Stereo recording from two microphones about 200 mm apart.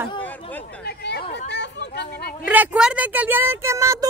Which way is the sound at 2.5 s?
5° right (ahead or behind).